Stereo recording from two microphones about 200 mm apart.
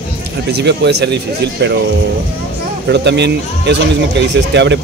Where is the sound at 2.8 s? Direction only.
60° right (ahead or behind).